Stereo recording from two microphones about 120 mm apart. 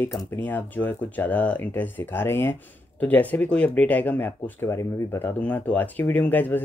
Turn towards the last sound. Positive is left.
turn(degrees=15)  # may be behind; listen again after turning